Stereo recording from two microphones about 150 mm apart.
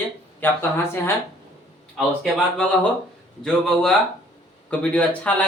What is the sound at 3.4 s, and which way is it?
Speech, 5° left (ahead or behind).